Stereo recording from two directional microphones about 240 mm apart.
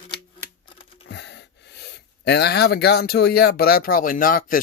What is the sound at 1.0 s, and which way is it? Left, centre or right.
Speech, left.